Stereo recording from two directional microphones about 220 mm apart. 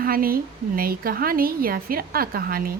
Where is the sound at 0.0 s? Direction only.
40° right (ahead or behind).